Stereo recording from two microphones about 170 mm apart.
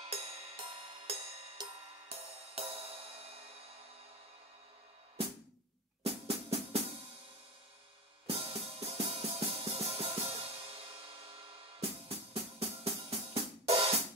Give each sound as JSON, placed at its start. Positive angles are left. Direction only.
{"t": 0.1, "sound": "music", "side_deg": -35}
{"t": 6.0, "sound": "drum", "side_deg": -35}
{"t": 8.3, "sound": "music", "side_deg": -35}